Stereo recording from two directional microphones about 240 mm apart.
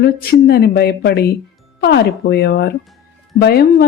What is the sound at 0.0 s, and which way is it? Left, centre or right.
A woman's voice, left.